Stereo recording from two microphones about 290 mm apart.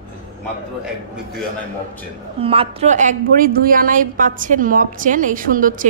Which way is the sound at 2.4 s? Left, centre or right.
Centre.